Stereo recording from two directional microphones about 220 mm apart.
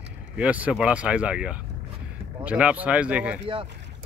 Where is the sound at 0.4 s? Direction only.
5° right (ahead or behind).